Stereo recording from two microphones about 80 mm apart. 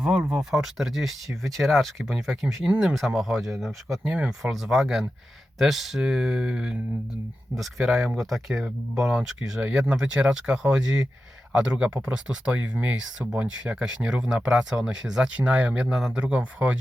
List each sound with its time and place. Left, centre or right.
0.3 s speech: centre